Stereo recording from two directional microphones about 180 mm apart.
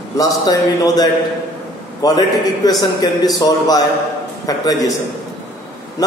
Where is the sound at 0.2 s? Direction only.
20° left (ahead or behind).